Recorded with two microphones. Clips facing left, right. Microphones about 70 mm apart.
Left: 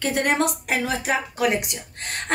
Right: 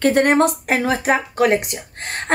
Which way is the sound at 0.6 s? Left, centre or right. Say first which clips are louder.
Right 6 dB; right.